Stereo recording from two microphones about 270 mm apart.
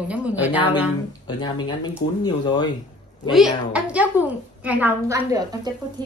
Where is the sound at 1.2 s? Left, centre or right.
Centre.